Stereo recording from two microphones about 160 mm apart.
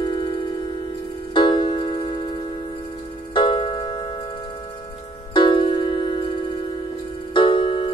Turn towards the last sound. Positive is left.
turn(degrees=30)  # may be behind; listen again after turning